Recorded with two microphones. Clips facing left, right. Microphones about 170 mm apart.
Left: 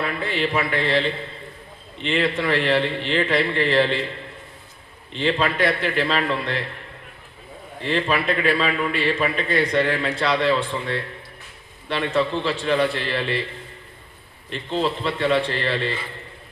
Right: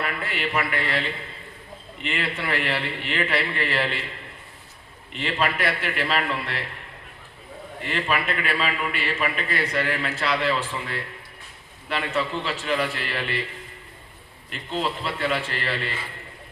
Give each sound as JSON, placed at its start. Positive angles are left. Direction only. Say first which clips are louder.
{"t": 0.0, "sound": "a man's voice", "louder": "left 5 dB", "side_deg": 30}
{"t": 5.1, "sound": "a man's voice", "louder": "left 4 dB", "side_deg": 30}
{"t": 7.8, "sound": "a man's voice", "louder": "left 4 dB", "side_deg": 30}
{"t": 14.8, "sound": "a man's voice", "louder": "left 5 dB", "side_deg": 30}